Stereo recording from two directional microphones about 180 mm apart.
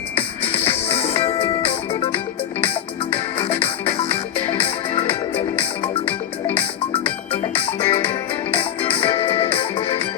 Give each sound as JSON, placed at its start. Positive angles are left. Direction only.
{"t": 0.2, "sound": "music", "side_deg": 30}